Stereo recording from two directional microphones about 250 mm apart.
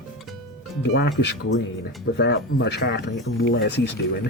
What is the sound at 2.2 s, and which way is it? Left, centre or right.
Speech, left.